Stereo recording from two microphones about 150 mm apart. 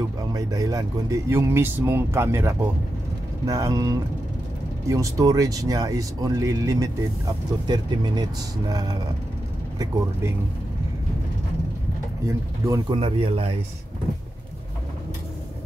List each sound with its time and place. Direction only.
0.3 s speech: 25° right (ahead or behind)
12.3 s speech: 20° right (ahead or behind)
12.9 s speech: 40° right (ahead or behind)